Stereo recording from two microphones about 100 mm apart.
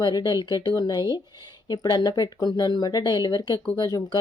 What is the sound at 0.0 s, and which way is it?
Speech, 50° left (ahead or behind).